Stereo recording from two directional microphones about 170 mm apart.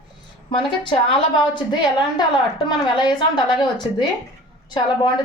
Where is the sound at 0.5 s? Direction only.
30° left (ahead or behind).